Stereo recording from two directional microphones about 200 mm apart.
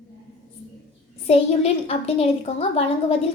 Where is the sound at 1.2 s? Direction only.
30° left (ahead or behind).